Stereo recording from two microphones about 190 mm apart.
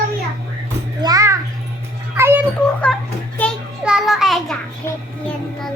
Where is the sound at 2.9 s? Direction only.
Centre (ahead or behind).